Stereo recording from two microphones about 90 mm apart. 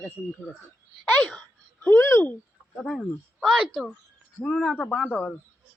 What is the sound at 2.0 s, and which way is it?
Speech, 25° left (ahead or behind).